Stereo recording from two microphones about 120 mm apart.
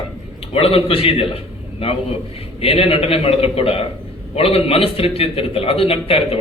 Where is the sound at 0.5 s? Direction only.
55° left (ahead or behind).